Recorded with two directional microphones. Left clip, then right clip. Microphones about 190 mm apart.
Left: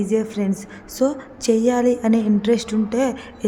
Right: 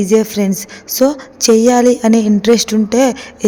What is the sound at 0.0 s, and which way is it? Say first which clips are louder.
Speech: right 9 dB; 25° right (ahead or behind).